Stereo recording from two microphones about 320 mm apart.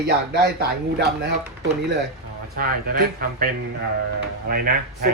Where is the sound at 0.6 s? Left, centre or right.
Right.